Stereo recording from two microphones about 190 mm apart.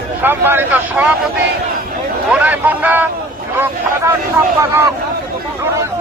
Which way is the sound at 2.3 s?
10° right (ahead or behind).